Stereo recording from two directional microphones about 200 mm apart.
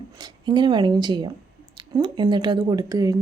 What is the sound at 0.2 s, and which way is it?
Speech, 20° right (ahead or behind).